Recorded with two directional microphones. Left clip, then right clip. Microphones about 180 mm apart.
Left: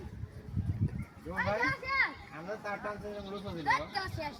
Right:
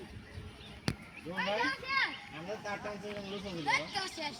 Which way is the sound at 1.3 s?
10° right (ahead or behind).